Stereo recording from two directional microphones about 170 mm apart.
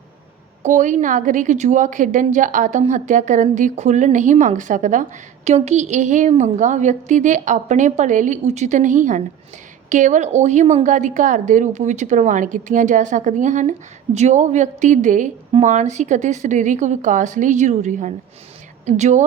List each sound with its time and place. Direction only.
0.6 s a woman's voice: 45° right (ahead or behind)